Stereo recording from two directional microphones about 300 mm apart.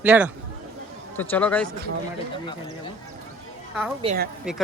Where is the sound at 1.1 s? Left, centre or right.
Centre.